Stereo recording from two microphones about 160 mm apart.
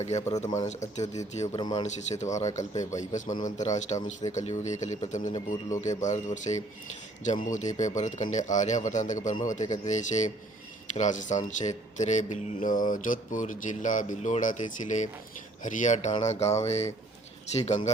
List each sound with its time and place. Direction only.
0.0 s speech: 45° left (ahead or behind)
1.5 s speech: 25° left (ahead or behind)
1.8 s speech: 45° left (ahead or behind)